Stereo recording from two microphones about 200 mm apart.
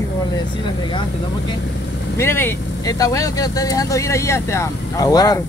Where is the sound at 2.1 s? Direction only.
10° left (ahead or behind).